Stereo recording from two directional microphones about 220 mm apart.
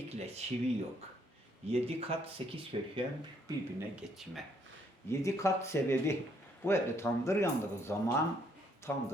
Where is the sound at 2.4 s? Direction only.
25° right (ahead or behind).